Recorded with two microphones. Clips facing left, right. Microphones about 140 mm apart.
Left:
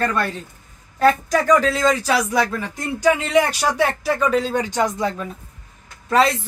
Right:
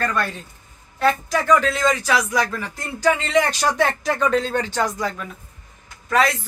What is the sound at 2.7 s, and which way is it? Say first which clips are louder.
A woman's voice: left 2 dB; 10° left (ahead or behind).